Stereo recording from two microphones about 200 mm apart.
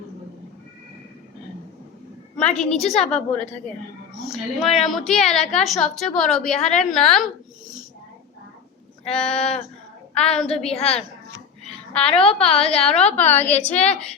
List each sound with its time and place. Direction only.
2.4 s a woman's voice: 5° left (ahead or behind)
9.1 s a woman's voice: 5° left (ahead or behind)
10.5 s a woman's voice: 30° left (ahead or behind)
11.6 s a sound: 5° left (ahead or behind)
12.1 s a woman's voice: 30° left (ahead or behind)
13.1 s a woman's voice: 10° left (ahead or behind)